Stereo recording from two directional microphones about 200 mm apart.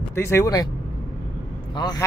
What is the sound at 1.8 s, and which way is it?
Speech, 20° left (ahead or behind).